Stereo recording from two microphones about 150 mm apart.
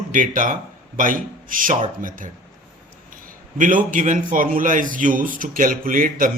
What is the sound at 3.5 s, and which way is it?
A man's voice, 60° right (ahead or behind).